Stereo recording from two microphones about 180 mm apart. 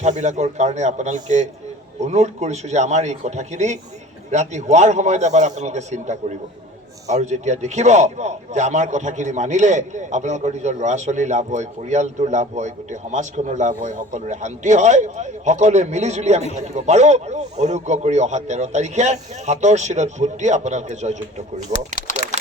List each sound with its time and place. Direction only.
0.0 s a man's voice: 40° right (ahead or behind)